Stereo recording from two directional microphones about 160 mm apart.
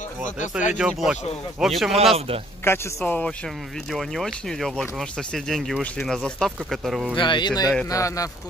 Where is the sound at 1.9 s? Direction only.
35° right (ahead or behind).